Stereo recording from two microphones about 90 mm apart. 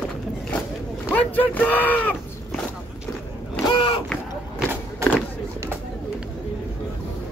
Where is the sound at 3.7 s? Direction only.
80° left.